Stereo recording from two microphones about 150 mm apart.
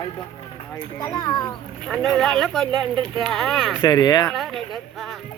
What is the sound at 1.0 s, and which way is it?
Speech, 25° left (ahead or behind).